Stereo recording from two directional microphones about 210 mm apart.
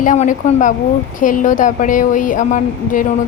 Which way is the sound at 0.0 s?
40° left (ahead or behind).